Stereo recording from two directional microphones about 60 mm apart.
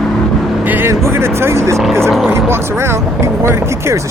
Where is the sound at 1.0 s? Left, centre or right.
Right.